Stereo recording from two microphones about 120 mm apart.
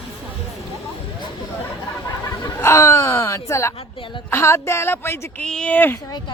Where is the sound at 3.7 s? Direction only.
45° left (ahead or behind).